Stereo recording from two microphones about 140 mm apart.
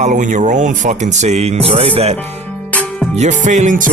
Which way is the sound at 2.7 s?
10° left (ahead or behind).